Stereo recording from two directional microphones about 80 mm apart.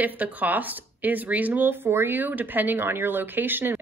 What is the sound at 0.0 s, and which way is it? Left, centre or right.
Speech, right.